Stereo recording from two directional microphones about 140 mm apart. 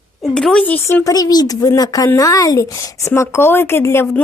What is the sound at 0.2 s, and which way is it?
A woman's voice, 5° left (ahead or behind).